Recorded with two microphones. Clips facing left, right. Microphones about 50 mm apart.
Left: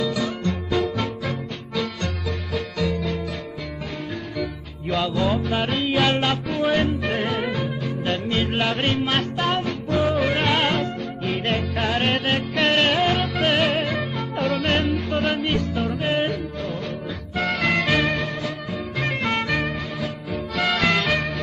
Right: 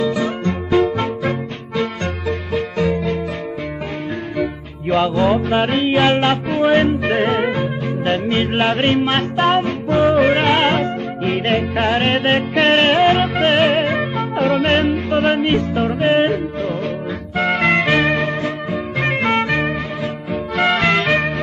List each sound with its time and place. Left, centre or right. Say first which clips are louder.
0.0 s music: right 5 dB; right
4.4 s music: right 7 dB; right
14.5 s yodeling: right 6 dB; right
14.9 s music: right 6 dB; right